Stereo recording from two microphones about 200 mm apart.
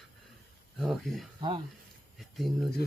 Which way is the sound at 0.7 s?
Centre (ahead or behind).